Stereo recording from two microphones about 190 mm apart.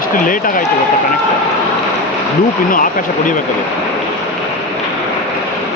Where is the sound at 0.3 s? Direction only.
45° left (ahead or behind).